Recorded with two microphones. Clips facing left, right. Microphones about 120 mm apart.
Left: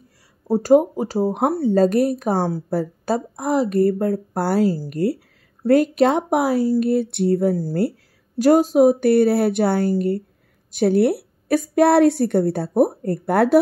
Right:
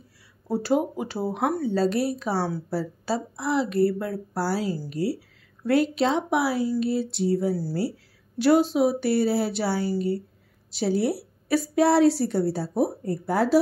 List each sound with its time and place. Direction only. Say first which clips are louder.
0.5 s a woman's voice: left 9 dB; 45° left (ahead or behind); by 13.6 s 60° left (ahead or behind)